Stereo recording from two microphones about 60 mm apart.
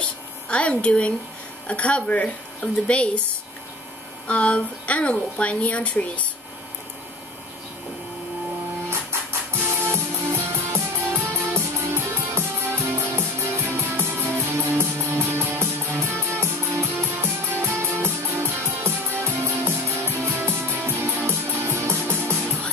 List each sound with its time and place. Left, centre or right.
0.0 s a sound: centre
1.7 s speech: left
4.3 s speech: left
9.5 s music: right